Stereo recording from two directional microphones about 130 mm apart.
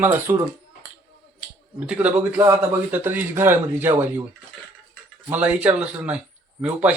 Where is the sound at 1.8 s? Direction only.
10° right (ahead or behind).